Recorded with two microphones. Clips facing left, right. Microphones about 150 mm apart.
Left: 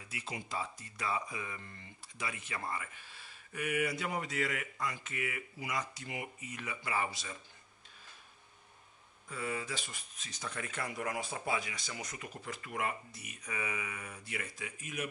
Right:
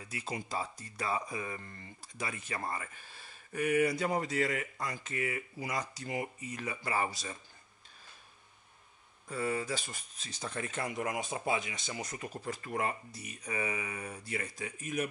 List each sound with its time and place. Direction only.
0.1 s speech: 40° right (ahead or behind)
9.3 s speech: 40° right (ahead or behind)